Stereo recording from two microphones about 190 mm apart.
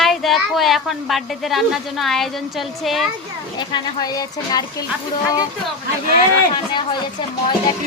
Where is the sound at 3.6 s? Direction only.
20° left (ahead or behind).